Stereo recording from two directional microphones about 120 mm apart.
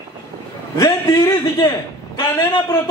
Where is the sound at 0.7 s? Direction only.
30° left (ahead or behind).